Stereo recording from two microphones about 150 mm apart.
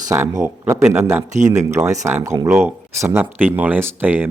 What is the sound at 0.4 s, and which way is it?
A man's voice, 15° right (ahead or behind).